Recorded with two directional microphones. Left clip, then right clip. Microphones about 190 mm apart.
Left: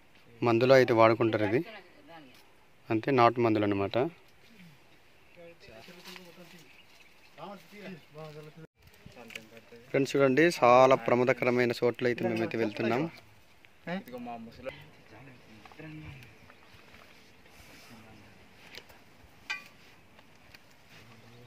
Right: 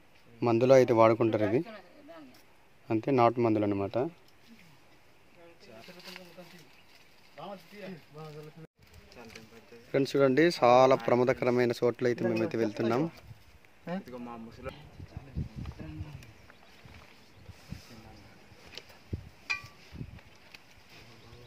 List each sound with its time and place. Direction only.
0.4 s speech: centre (ahead or behind)
2.9 s speech: centre (ahead or behind)
8.2 s speech: 5° right (ahead or behind)
9.8 s speech: centre (ahead or behind)
14.1 s speech: 35° right (ahead or behind)